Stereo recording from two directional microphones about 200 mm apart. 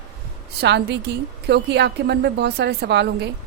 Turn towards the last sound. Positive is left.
turn(degrees=-55)  # may be behind; listen again after turning